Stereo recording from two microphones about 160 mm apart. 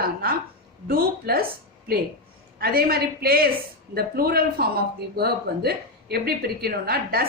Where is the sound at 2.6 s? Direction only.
75° right (ahead or behind).